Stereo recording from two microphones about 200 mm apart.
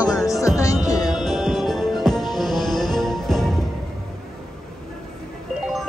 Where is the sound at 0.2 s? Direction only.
15° left (ahead or behind).